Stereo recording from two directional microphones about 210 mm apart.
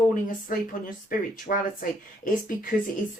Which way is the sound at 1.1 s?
40° left (ahead or behind).